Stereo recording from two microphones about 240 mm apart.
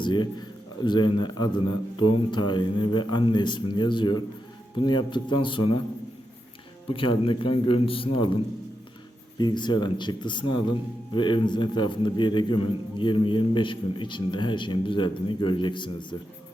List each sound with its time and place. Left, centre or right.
0.0 s a man's voice: centre
6.8 s a man's voice: left
9.4 s a man's voice: centre